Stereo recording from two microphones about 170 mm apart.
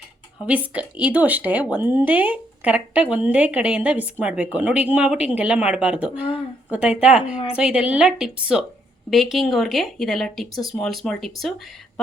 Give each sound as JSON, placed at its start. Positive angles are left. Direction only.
{"t": 0.4, "sound": "a woman's voice", "side_deg": -5}